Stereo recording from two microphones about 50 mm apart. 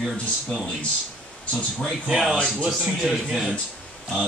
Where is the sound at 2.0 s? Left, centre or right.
Centre.